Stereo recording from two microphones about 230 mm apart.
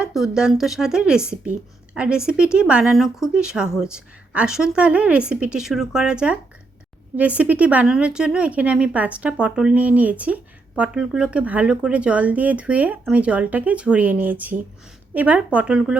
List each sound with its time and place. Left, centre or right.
0.0 s speech: centre